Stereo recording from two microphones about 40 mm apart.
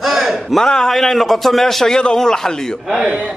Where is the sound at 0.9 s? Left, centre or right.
Centre.